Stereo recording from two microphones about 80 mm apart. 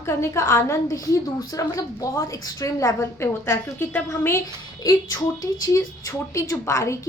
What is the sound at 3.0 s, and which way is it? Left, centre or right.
Speech, left.